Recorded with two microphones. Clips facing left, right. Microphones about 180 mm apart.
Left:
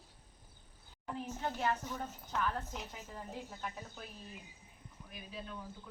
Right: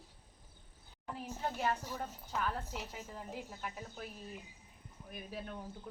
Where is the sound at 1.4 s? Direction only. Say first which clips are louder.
Even; 5° right (ahead or behind).